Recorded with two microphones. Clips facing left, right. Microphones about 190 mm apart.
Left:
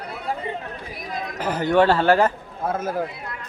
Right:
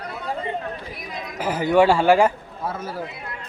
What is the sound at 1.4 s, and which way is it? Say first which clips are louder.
Speech: right 1 dB; 10° right (ahead or behind).